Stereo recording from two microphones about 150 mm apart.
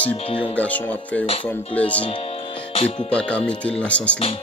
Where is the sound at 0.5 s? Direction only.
10° left (ahead or behind).